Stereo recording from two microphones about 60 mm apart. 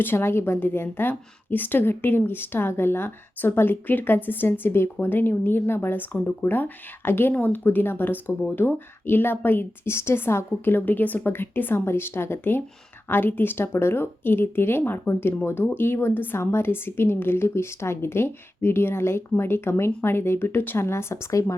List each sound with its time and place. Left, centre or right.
0.0 s a woman's voice: left